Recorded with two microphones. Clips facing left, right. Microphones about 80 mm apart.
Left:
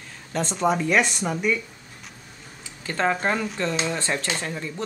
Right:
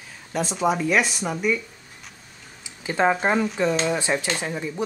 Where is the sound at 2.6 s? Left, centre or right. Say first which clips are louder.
Right 3 dB; centre.